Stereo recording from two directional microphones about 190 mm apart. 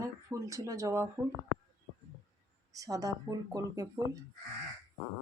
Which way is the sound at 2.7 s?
20° right (ahead or behind).